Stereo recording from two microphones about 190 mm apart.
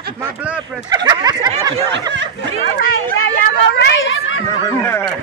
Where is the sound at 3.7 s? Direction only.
65° left (ahead or behind).